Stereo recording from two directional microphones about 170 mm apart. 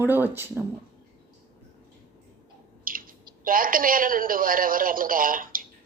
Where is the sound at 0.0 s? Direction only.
10° right (ahead or behind).